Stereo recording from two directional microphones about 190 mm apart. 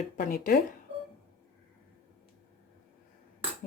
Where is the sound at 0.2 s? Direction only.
50° left (ahead or behind).